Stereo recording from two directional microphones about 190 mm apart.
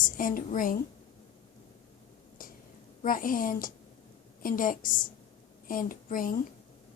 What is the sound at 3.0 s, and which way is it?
A woman's voice, 45° left (ahead or behind).